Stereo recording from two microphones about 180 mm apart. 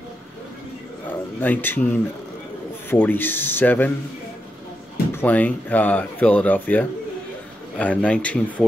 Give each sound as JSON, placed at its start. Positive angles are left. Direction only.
{"t": 1.4, "sound": "speech", "side_deg": 10}
{"t": 2.9, "sound": "speech", "side_deg": 10}
{"t": 5.1, "sound": "speech", "side_deg": 10}